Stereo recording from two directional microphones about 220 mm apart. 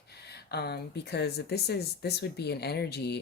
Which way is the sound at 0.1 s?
45° left (ahead or behind).